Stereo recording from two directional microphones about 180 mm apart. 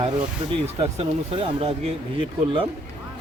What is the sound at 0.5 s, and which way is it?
Speech, 35° right (ahead or behind).